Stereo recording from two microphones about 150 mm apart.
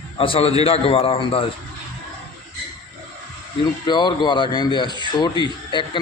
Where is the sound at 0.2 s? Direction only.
40° left (ahead or behind).